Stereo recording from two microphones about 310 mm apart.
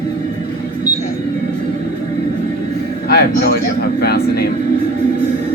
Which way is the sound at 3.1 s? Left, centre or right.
Left.